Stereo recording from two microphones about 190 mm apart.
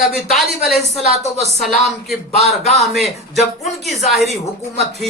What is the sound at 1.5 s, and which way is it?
Speech, centre (ahead or behind).